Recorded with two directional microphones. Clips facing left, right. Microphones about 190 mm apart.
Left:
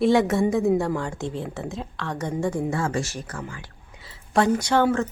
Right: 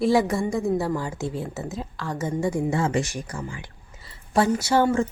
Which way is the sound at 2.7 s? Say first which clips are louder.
Right 2 dB; 20° right (ahead or behind).